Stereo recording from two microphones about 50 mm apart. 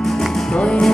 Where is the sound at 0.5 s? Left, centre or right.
Left.